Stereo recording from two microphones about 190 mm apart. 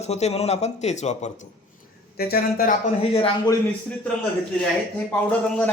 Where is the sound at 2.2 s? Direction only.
50° left (ahead or behind).